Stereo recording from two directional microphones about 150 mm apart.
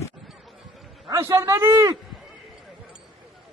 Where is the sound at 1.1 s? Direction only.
20° right (ahead or behind).